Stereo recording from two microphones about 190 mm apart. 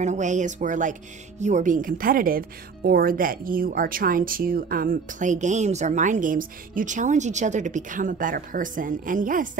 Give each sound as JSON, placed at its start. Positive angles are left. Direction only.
{"t": 0.0, "sound": "a woman's voice", "side_deg": -40}